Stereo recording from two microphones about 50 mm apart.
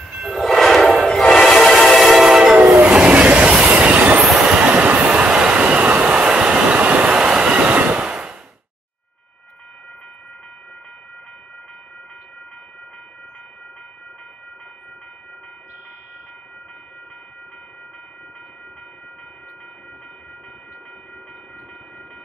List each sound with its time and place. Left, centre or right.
0.4 s train: centre
2.2 s train: centre; by 4.2 s right
4.2 s train: centre
4.5 s train: right